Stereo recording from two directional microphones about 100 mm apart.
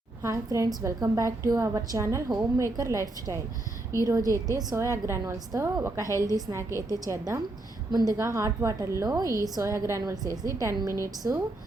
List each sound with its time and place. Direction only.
0.2 s a woman's voice: 30° right (ahead or behind)
8.1 s a woman's voice: 30° right (ahead or behind)